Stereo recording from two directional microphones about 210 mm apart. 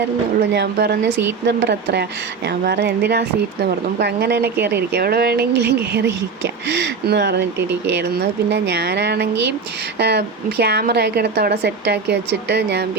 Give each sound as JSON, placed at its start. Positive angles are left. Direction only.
{"t": 0.5, "sound": "speech", "side_deg": -50}